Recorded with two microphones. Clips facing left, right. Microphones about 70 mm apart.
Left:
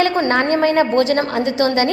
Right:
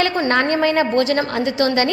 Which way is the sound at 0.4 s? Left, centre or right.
Left.